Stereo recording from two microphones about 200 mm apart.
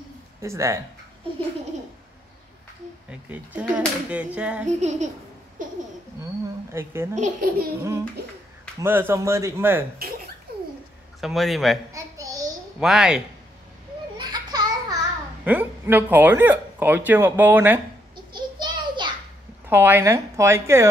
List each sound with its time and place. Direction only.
0.4 s speech: 15° right (ahead or behind)
3.1 s speech: 5° right (ahead or behind)
4.6 s speech: 35° right (ahead or behind)
6.7 s speech: 10° right (ahead or behind)
7.2 s speech: 40° right (ahead or behind)
8.7 s speech: 10° right (ahead or behind)
11.1 s a man's voice: centre (ahead or behind)
11.9 s a sound: 15° right (ahead or behind)
12.8 s a man's voice: centre (ahead or behind)
14.1 s a sound: 20° right (ahead or behind)
15.4 s speech: 10° right (ahead or behind)
18.1 s a sound: 20° right (ahead or behind)
19.7 s speech: 10° right (ahead or behind)